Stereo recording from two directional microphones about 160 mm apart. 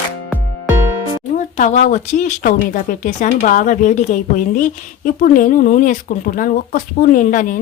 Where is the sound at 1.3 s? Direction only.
50° left (ahead or behind).